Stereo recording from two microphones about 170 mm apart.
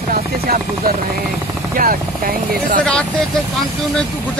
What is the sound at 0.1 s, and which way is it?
Speech, 60° right (ahead or behind).